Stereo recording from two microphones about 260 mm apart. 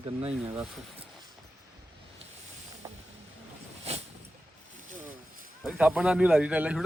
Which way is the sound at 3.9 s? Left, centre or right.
Right.